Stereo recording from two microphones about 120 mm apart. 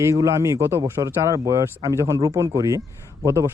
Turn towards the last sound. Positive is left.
turn(degrees=-25)  # may be behind; listen again after turning